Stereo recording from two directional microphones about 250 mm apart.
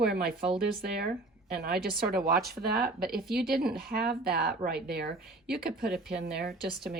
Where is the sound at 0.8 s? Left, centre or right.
Right.